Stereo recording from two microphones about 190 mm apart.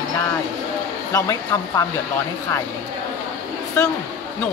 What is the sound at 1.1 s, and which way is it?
Speech, 15° left (ahead or behind).